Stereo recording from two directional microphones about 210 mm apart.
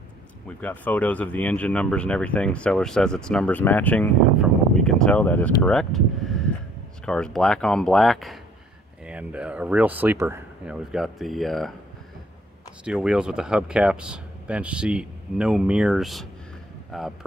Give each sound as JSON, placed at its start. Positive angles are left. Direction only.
{"t": 0.5, "sound": "speech", "side_deg": 5}
{"t": 12.8, "sound": "speech", "side_deg": -5}